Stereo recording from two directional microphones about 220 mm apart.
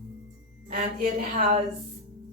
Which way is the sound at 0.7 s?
35° right (ahead or behind).